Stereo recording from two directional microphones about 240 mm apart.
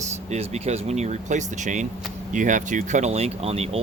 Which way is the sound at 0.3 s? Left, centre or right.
Right.